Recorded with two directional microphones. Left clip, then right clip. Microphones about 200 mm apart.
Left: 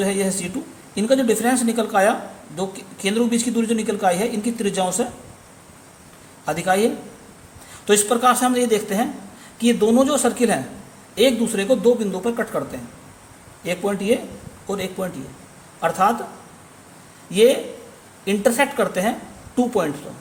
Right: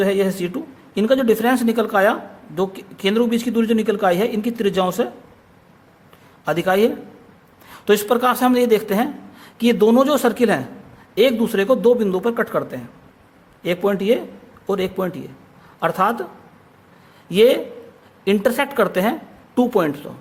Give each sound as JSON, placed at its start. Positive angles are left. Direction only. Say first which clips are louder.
{"t": 0.0, "sound": "speech", "louder": "right 4 dB", "side_deg": -40}
{"t": 6.4, "sound": "speech", "louder": "right 2 dB", "side_deg": -40}
{"t": 17.3, "sound": "speech", "louder": "right 1 dB", "side_deg": -40}